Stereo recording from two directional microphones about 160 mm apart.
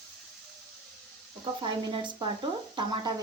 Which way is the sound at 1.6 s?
30° right (ahead or behind).